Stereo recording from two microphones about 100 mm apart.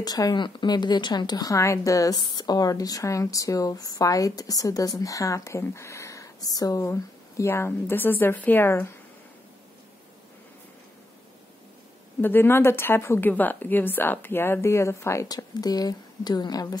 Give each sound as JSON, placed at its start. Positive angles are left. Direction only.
{"t": 0.0, "sound": "speech", "side_deg": 40}
{"t": 2.1, "sound": "speech", "side_deg": 45}
{"t": 12.2, "sound": "a woman's voice", "side_deg": 20}
{"t": 15.3, "sound": "speech", "side_deg": 40}